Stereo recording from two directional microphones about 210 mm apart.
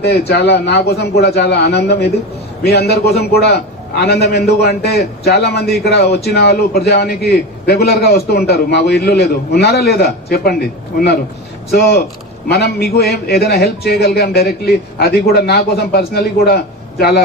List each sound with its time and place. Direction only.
0.0 s a man's voice: 50° left (ahead or behind)